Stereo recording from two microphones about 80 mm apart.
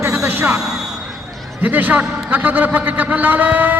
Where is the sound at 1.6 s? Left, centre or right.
Right.